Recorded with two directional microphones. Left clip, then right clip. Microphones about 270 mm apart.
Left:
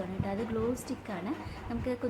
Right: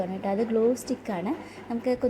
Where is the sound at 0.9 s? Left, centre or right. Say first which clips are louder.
Right 8 dB; centre.